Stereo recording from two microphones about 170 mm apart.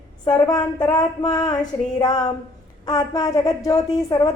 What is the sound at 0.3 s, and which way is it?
A woman's voice, 25° left (ahead or behind).